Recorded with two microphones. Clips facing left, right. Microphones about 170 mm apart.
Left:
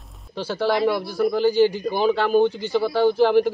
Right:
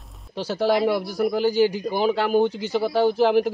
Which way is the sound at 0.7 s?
10° right (ahead or behind).